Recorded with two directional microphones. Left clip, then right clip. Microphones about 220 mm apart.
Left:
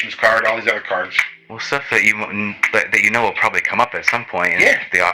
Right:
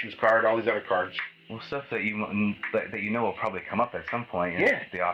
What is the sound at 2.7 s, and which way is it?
Speech, 20° left (ahead or behind).